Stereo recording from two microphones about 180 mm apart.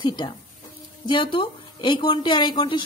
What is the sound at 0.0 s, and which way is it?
A woman's voice, 25° left (ahead or behind).